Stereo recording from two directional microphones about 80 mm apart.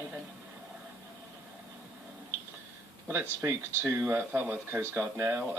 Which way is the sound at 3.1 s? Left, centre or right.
Right.